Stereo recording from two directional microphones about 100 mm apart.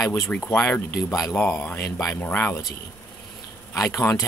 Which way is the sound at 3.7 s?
30° left (ahead or behind).